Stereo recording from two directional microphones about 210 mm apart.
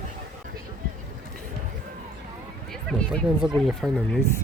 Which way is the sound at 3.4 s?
Centre (ahead or behind).